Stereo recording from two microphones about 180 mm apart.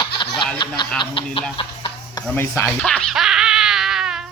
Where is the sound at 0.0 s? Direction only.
25° left (ahead or behind).